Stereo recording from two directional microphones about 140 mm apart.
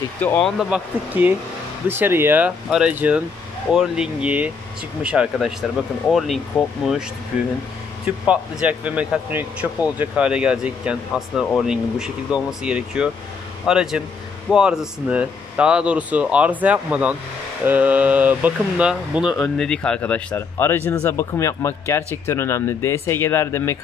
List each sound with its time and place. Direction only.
0.2 s speech: 10° left (ahead or behind)
0.6 s speech: 5° right (ahead or behind)
8.3 s speech: 10° right (ahead or behind)
19.5 s speech: 5° left (ahead or behind)